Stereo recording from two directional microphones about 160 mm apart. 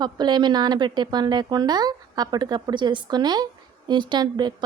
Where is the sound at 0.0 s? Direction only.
25° right (ahead or behind).